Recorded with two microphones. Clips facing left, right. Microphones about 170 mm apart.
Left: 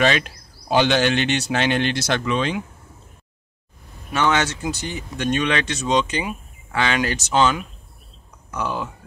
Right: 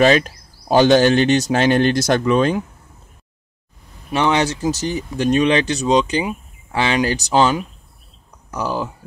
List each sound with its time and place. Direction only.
0.0 s speech: 40° right (ahead or behind)
4.1 s speech: 30° right (ahead or behind)